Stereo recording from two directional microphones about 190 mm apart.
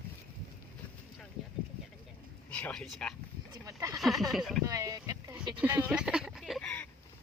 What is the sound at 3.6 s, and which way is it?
Speech, 15° right (ahead or behind).